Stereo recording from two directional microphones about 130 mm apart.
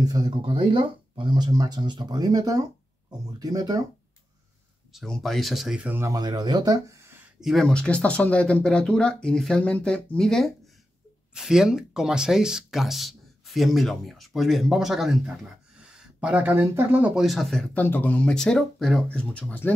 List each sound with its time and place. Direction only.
0.0 s speech: 30° right (ahead or behind)
0.5 s speech: 40° right (ahead or behind)
4.9 s speech: 5° left (ahead or behind)
5.9 s speech: 20° right (ahead or behind)
6.1 s speech: 30° right (ahead or behind)
7.3 s speech: centre (ahead or behind)